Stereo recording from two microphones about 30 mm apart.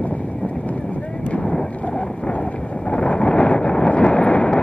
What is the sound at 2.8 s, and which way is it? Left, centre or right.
Wind noise, left.